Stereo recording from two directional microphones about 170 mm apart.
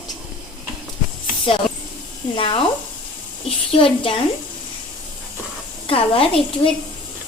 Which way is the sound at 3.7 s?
30° left (ahead or behind).